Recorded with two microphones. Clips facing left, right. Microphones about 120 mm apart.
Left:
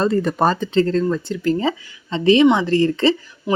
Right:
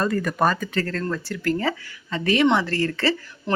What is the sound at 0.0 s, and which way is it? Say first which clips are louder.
Speech: left 4 dB; 25° left (ahead or behind).